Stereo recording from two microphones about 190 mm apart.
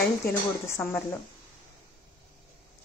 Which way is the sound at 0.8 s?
10° left (ahead or behind).